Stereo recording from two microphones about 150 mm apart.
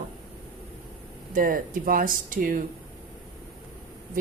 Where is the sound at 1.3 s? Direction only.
65° right (ahead or behind).